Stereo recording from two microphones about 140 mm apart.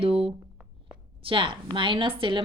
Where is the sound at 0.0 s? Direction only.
45° right (ahead or behind).